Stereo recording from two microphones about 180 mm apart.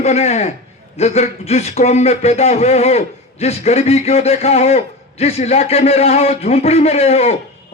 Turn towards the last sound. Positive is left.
turn(degrees=35)  # may be behind; listen again after turning